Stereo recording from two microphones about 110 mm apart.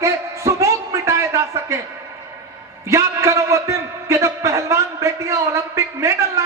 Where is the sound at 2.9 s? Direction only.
25° right (ahead or behind).